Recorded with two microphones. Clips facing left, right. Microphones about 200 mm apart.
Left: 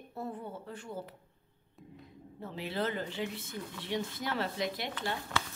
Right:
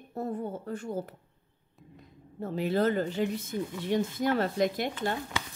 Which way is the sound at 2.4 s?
45° right (ahead or behind).